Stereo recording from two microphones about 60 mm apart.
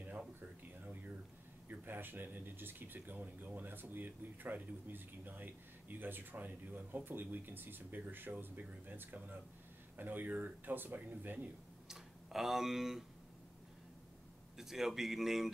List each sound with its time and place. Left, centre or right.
1.7 s speech: right
11.9 s speech: centre
14.6 s speech: centre